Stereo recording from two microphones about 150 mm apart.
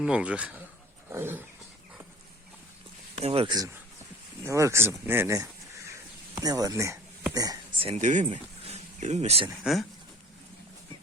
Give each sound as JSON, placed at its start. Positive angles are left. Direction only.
{"t": 0.0, "sound": "speech", "side_deg": -5}
{"t": 3.2, "sound": "speech", "side_deg": -45}
{"t": 3.4, "sound": "speech", "side_deg": -25}
{"t": 7.8, "sound": "speech", "side_deg": -45}